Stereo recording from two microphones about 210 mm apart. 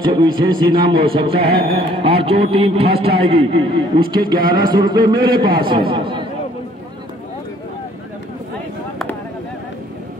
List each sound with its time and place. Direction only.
0.0 s a man's voice: 20° right (ahead or behind)